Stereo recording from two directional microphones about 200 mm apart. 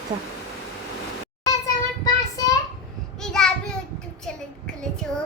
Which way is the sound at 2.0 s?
15° left (ahead or behind).